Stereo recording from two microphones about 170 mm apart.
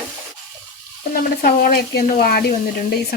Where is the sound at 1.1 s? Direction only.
60° left (ahead or behind).